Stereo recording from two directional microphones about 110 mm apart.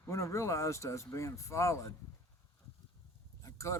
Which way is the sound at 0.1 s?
25° left (ahead or behind).